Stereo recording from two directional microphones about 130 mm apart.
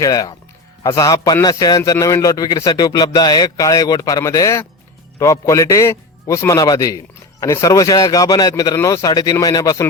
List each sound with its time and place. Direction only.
0.0 s a man's voice: 30° left (ahead or behind)